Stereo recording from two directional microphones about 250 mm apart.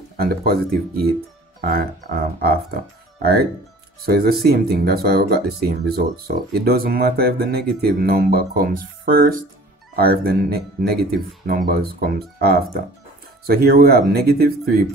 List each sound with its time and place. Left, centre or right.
0.2 s speech: right